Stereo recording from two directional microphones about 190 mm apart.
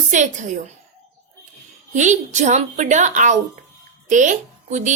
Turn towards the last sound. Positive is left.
turn(degrees=-40)  # may be behind; listen again after turning